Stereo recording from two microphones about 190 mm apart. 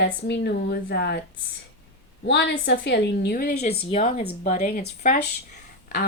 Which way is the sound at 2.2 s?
60° left (ahead or behind).